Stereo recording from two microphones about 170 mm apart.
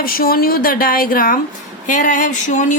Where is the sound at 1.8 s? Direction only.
50° left (ahead or behind).